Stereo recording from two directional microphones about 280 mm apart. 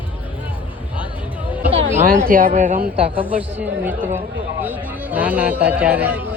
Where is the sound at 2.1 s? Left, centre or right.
Right.